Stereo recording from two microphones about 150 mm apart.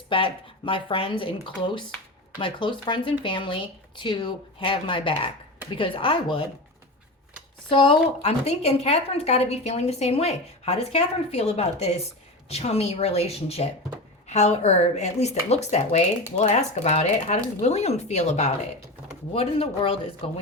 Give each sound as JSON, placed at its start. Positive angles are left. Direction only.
{"t": 0.1, "sound": "speech", "side_deg": 35}
{"t": 7.7, "sound": "a woman's voice", "side_deg": 35}